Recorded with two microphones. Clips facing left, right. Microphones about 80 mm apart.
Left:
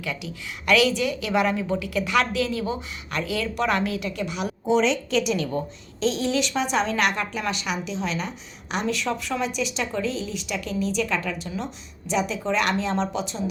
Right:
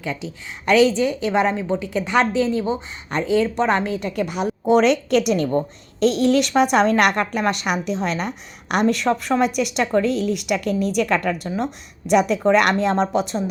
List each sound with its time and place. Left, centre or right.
0.0 s a woman's voice: right
4.0 s a woman's voice: right
6.0 s a woman's voice: right